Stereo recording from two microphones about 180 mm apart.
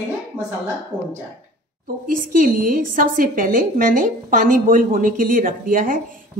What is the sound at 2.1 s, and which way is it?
A woman's voice, 50° right (ahead or behind).